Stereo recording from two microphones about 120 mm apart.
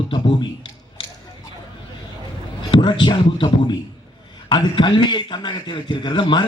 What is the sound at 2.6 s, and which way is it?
A man's voice, 40° left (ahead or behind).